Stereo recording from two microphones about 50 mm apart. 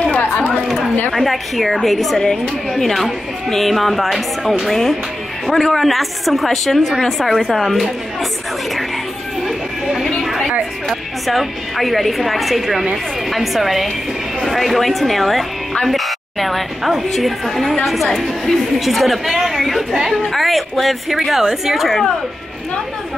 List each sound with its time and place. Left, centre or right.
0.1 s chatter: left
1.1 s a woman's voice: centre
9.4 s music: centre
10.9 s a woman's voice: centre